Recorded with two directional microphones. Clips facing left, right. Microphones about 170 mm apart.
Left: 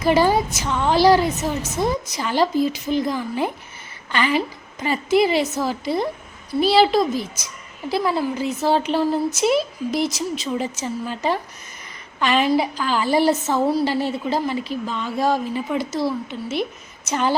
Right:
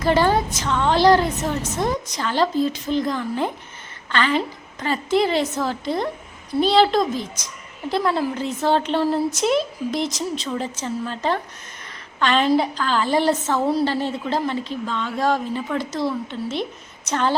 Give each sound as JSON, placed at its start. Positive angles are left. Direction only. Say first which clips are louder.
{"t": 0.0, "sound": "a woman's voice", "louder": "left 1 dB", "side_deg": 10}